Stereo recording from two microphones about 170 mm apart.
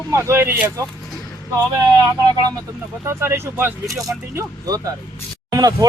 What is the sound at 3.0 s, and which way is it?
Speech, 15° right (ahead or behind).